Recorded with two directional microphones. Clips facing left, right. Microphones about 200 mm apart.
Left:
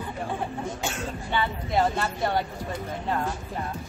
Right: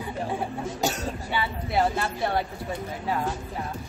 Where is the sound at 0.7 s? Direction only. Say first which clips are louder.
Right 4 dB; 40° right (ahead or behind).